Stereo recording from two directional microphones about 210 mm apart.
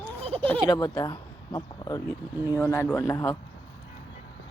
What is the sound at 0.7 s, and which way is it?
Speech, 20° left (ahead or behind).